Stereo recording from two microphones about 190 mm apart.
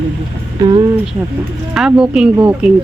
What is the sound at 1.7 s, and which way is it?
A woman's voice, 5° right (ahead or behind).